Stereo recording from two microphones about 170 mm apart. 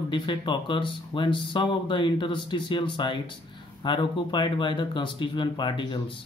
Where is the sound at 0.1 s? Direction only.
30° left (ahead or behind).